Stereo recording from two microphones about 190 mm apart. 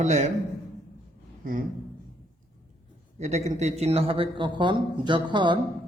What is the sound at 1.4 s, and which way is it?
Speech, 45° right (ahead or behind).